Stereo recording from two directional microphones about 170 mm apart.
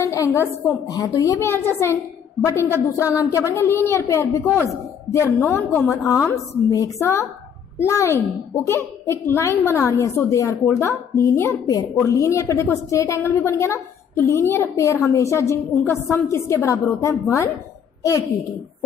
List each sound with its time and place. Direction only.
0.0 s a woman's voice: 20° left (ahead or behind)